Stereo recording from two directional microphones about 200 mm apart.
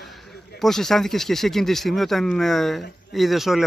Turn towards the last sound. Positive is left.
turn(degrees=0)  # may be behind; listen again after turning